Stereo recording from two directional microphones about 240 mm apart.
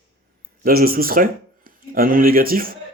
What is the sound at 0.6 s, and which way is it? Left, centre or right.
Speech, right.